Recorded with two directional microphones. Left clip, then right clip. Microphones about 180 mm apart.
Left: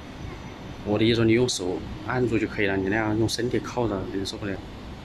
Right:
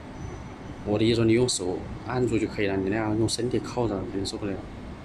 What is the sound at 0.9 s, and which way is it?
Speech, 5° right (ahead or behind).